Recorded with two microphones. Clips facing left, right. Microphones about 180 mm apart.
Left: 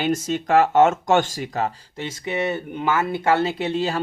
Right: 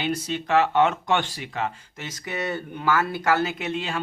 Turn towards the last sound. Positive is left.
turn(degrees=35)  # may be behind; listen again after turning